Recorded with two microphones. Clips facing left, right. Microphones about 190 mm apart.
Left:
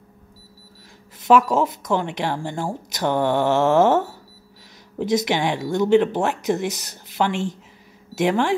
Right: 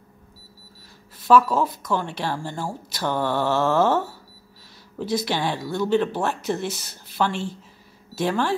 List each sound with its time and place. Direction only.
1.2 s a woman's voice: 20° left (ahead or behind)